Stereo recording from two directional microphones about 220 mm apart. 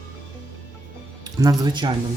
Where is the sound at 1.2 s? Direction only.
15° right (ahead or behind).